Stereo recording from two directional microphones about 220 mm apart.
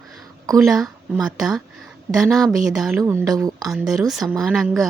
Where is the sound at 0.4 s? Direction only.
15° right (ahead or behind).